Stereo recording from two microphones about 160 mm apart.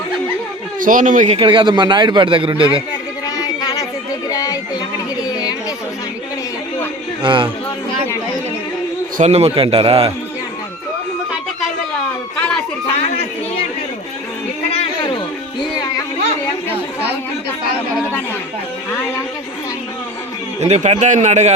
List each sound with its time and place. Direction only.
0.8 s a man's voice: 55° right (ahead or behind)
1.4 s a man's voice: 30° right (ahead or behind)
3.2 s a sound: 25° left (ahead or behind)
5.3 s chatter: 25° left (ahead or behind)
7.2 s a man's voice: 30° right (ahead or behind)
9.1 s a man's voice: 45° right (ahead or behind)
14.7 s a sound: 35° left (ahead or behind)
20.6 s a man's voice: 40° right (ahead or behind)